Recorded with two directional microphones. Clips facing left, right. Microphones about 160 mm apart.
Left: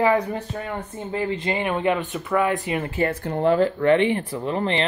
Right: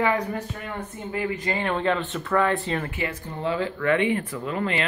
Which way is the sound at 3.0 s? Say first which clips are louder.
Left 11 dB; 55° left (ahead or behind).